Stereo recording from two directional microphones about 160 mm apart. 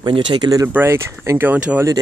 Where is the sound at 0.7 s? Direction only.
15° right (ahead or behind).